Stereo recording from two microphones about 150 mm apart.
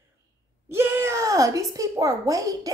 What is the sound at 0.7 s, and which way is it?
A child's voice, 15° right (ahead or behind).